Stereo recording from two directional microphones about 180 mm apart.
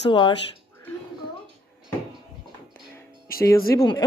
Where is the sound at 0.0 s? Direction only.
25° left (ahead or behind).